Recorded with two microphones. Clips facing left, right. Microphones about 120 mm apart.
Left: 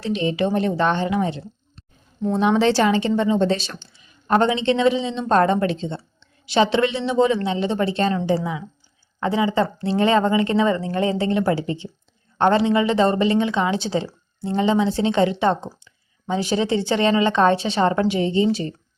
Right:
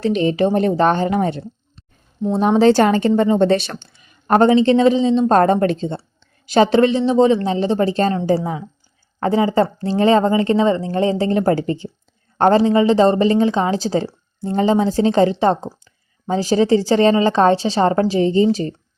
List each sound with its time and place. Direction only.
0.0 s a woman's voice: 45° right (ahead or behind)
2.4 s a woman's voice: 40° right (ahead or behind); by 4.4 s 55° right (ahead or behind)
4.4 s a woman's voice: 40° right (ahead or behind)
12.4 s a woman's voice: 35° right (ahead or behind)